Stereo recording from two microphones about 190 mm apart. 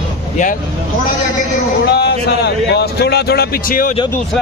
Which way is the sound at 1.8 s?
60° left (ahead or behind).